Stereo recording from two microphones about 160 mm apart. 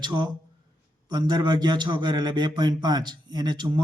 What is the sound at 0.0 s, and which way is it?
A man's voice, 30° right (ahead or behind).